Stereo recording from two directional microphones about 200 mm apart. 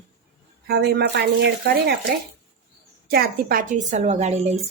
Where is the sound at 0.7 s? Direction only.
55° right (ahead or behind).